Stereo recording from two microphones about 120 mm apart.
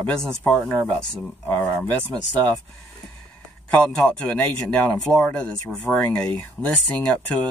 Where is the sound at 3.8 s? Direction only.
10° left (ahead or behind).